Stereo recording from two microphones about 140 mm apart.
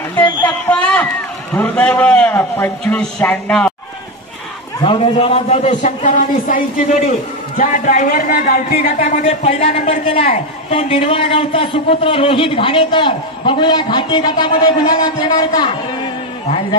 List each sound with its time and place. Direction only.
0.4 s a sound: 10° left (ahead or behind)
1.5 s a man's voice: 10° left (ahead or behind)
4.8 s a man's voice: 40° left (ahead or behind); by 9.2 s 70° left (ahead or behind)
9.2 s speech: 50° left (ahead or behind); by 15.7 s 30° left (ahead or behind)